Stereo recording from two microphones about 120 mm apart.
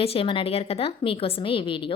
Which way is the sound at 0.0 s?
50° left (ahead or behind).